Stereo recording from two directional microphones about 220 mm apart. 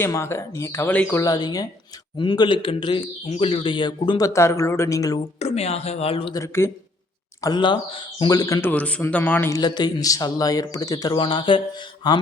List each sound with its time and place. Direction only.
0.0 s a man's voice: 10° left (ahead or behind)
5.4 s a man's voice: 30° left (ahead or behind)